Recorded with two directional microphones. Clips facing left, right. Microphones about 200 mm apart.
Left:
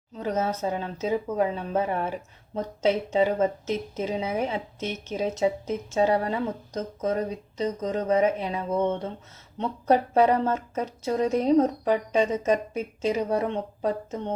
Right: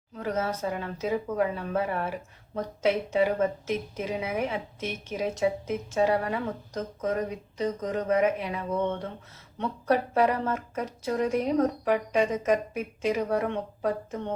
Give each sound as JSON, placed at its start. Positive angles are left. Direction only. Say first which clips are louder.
{"t": 0.2, "sound": "speech", "louder": "left 2 dB", "side_deg": 25}